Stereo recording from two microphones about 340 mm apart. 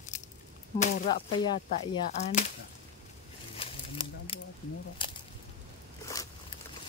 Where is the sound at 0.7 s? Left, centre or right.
Left.